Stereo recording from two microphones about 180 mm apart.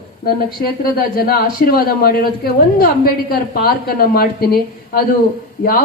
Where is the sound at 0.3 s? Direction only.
55° left (ahead or behind).